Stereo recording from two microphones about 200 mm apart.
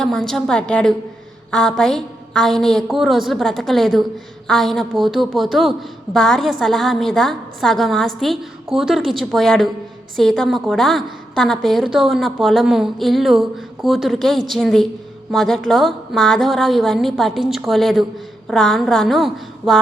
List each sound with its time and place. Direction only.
0.0 s a woman's voice: 5° left (ahead or behind)